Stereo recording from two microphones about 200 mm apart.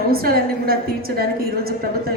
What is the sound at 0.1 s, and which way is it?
A woman's voice, 50° right (ahead or behind).